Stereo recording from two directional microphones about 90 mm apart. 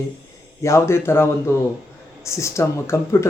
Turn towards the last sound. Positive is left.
turn(degrees=30)  # may be behind; listen again after turning